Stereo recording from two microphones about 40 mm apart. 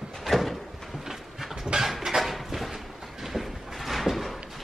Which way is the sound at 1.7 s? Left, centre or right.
Centre.